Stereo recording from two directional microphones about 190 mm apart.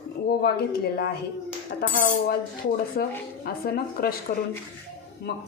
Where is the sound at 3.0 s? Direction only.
50° left (ahead or behind).